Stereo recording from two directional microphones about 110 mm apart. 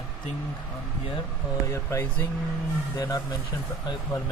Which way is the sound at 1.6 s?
25° left (ahead or behind).